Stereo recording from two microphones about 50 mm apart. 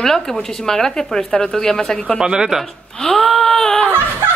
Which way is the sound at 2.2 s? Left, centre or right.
Centre.